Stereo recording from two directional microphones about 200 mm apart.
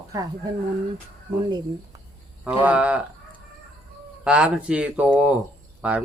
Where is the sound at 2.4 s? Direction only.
5° right (ahead or behind).